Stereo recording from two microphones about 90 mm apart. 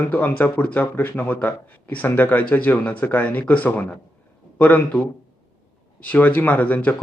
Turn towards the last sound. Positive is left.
turn(degrees=15)  # may be behind; listen again after turning